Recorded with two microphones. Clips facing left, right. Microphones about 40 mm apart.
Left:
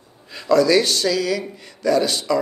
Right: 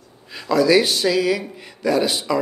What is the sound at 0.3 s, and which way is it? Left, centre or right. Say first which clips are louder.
Speech: even; centre.